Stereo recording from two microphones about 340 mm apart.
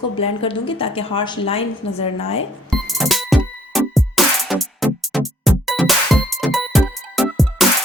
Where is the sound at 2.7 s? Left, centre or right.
Centre.